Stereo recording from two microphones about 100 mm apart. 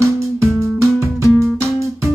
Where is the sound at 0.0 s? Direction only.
30° right (ahead or behind).